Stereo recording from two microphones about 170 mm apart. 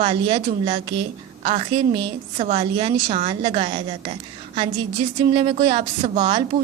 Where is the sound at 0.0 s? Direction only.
30° right (ahead or behind).